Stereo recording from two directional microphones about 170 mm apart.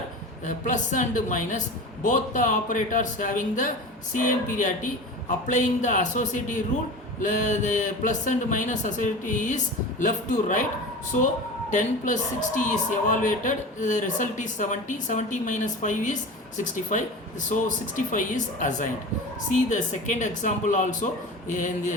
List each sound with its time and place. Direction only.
0.4 s a woman's voice: 50° left (ahead or behind)
11.7 s a woman's voice: 45° left (ahead or behind)
17.5 s a woman's voice: 50° left (ahead or behind)